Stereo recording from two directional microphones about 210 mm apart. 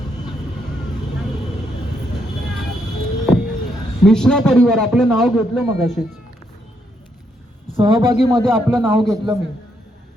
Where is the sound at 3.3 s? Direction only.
Centre (ahead or behind).